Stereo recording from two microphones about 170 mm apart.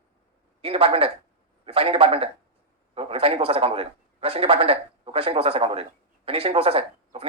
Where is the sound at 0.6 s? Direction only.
35° right (ahead or behind).